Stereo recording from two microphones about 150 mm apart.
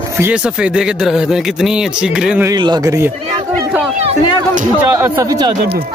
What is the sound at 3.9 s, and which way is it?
Speech, 50° right (ahead or behind).